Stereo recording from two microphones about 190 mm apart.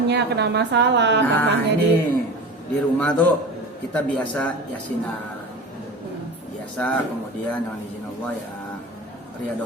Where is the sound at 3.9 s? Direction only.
5° left (ahead or behind).